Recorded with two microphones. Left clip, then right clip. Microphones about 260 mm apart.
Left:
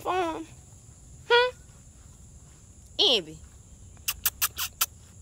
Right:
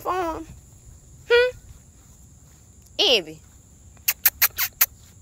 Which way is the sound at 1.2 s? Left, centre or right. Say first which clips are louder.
Right 4 dB; centre.